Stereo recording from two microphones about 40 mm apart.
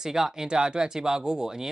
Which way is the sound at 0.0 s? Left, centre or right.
Centre.